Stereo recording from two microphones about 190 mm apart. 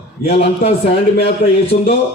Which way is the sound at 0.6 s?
35° left (ahead or behind).